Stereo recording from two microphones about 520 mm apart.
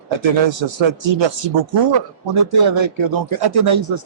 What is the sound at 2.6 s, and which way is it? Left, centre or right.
Speech, right.